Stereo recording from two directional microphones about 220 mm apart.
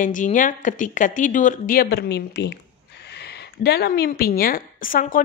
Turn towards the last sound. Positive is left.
turn(degrees=40)  # may be behind; listen again after turning